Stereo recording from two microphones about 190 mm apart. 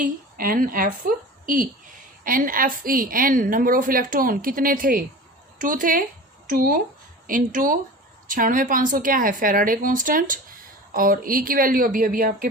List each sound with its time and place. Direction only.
0.0 s a woman's voice: 50° right (ahead or behind)